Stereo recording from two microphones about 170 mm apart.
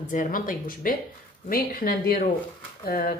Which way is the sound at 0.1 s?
50° left (ahead or behind).